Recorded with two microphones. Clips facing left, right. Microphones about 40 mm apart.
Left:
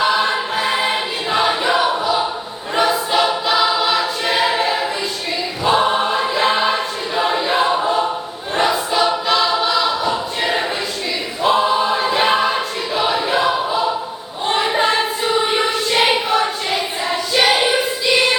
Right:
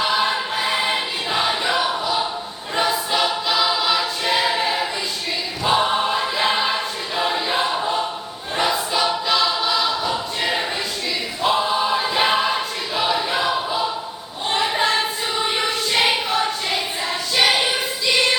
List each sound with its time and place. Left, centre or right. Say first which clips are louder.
0.0 s choir: left 3 dB; centre
11.7 s choir: left 3 dB; centre
14.4 s a sound: left 3 dB; centre